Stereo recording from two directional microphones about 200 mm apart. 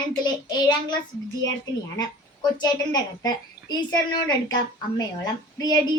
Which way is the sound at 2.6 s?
20° left (ahead or behind).